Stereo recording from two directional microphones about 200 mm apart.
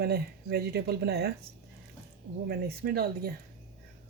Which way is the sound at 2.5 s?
50° right (ahead or behind).